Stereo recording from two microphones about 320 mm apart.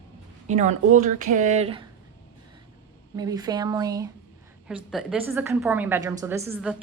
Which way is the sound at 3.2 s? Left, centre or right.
Centre.